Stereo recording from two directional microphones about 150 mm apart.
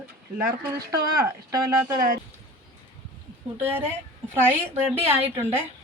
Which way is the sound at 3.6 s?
15° right (ahead or behind).